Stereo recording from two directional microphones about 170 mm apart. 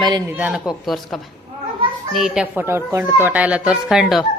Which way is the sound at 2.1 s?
Centre (ahead or behind).